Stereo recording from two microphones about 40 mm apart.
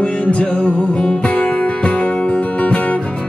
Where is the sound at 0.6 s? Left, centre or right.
Left.